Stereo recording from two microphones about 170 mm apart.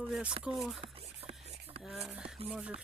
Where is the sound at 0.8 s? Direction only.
35° right (ahead or behind).